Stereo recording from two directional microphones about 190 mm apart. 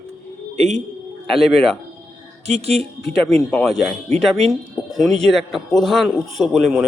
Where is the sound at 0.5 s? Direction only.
35° right (ahead or behind).